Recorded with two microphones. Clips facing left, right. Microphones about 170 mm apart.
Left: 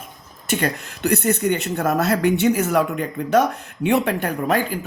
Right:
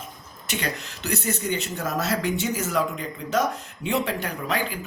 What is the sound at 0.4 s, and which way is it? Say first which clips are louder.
Speech: left 7 dB; 50° left (ahead or behind).